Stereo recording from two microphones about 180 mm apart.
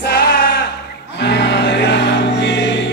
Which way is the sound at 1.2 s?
70° left (ahead or behind).